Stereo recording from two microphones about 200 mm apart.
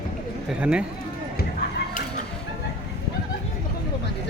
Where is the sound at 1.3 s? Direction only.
50° left (ahead or behind).